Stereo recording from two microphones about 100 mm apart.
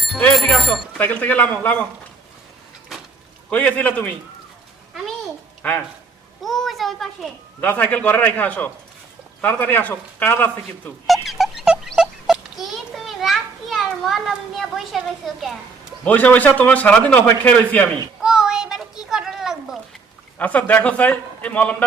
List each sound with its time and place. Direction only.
0.3 s speech: centre (ahead or behind)
0.9 s a man's voice: 15° left (ahead or behind)
3.5 s a man's voice: 15° left (ahead or behind)
6.4 s a child's voice: centre (ahead or behind)
7.6 s a man's voice: 15° left (ahead or behind)
11.0 s a sound: centre (ahead or behind)
11.9 s children playing: 5° right (ahead or behind)
16.0 s a man's voice: 15° left (ahead or behind)
18.2 s a sound: 5° right (ahead or behind)
20.4 s a man's voice: 15° left (ahead or behind)